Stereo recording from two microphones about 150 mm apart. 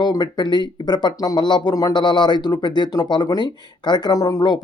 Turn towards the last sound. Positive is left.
turn(degrees=30)  # may be behind; listen again after turning